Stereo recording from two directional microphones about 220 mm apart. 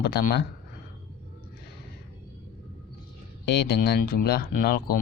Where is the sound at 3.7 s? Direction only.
45° left (ahead or behind).